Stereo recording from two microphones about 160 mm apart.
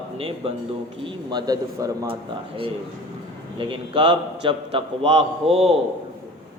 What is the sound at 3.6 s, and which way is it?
A man's voice, 30° right (ahead or behind).